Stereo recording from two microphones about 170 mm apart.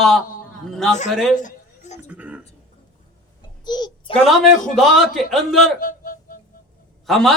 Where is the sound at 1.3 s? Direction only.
45° left (ahead or behind).